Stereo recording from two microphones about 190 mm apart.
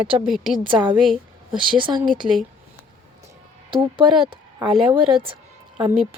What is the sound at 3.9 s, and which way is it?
Speech, 30° right (ahead or behind).